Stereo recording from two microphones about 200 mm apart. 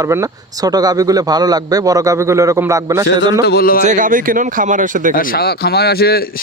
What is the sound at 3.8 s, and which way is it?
Speech, 40° right (ahead or behind).